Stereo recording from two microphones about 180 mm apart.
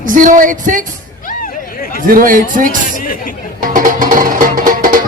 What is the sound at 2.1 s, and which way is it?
Speech, 50° right (ahead or behind).